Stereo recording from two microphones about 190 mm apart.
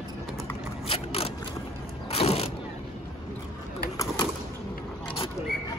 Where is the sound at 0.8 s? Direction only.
30° left (ahead or behind).